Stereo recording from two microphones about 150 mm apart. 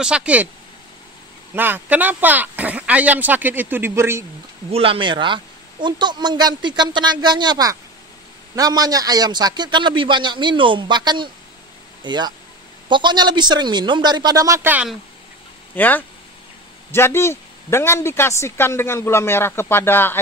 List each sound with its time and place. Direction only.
0.0 s speech: 5° right (ahead or behind)
1.5 s speech: 15° right (ahead or behind)
4.6 s speech: 40° right (ahead or behind); by 14.9 s 15° right (ahead or behind)
15.7 s speech: 10° left (ahead or behind)